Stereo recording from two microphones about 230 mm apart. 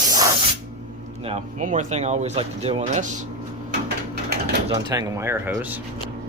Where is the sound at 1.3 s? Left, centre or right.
Right.